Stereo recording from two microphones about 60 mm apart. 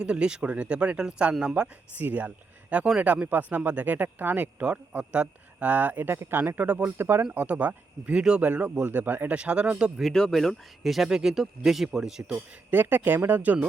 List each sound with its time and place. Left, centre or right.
0.0 s speech: centre; by 7.3 s right
7.3 s speech: right
8.1 s speech: centre
8.4 s speech: right
10.0 s speech: centre
12.7 s speech: right